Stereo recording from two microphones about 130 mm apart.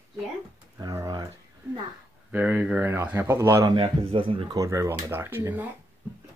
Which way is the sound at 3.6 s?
40° right (ahead or behind).